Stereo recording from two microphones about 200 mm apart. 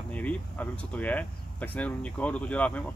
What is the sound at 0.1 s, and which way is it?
Speech, 5° left (ahead or behind).